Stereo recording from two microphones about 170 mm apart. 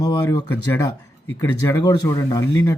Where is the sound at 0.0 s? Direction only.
25° left (ahead or behind).